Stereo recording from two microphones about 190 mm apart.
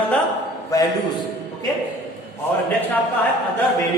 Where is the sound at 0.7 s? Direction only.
15° left (ahead or behind).